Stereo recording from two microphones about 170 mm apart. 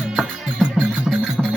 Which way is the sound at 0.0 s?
Centre (ahead or behind).